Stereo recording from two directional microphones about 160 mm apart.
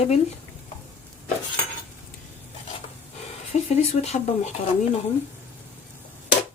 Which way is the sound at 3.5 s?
40° left (ahead or behind).